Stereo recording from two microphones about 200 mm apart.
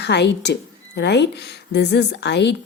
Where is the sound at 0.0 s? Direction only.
60° left (ahead or behind).